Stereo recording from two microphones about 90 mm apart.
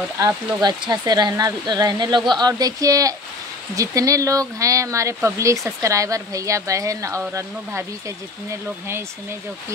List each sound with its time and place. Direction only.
0.6 s speech: 50° right (ahead or behind); by 9.0 s 30° right (ahead or behind)